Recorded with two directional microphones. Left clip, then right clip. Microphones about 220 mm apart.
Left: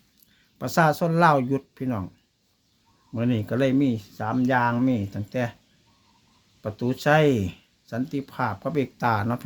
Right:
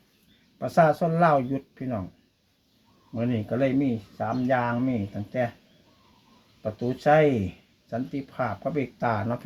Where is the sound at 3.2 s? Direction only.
50° left (ahead or behind).